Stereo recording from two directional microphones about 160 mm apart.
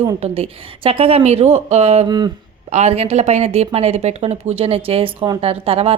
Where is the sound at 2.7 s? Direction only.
40° right (ahead or behind).